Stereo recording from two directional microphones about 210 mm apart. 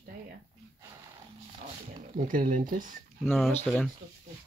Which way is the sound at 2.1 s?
40° right (ahead or behind).